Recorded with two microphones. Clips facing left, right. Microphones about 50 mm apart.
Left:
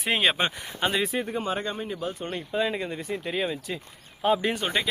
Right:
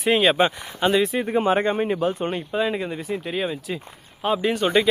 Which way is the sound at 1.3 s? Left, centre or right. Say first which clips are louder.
Right 9 dB; right.